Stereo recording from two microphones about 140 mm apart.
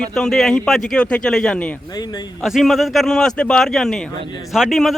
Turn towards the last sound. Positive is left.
turn(degrees=0)  # may be behind; listen again after turning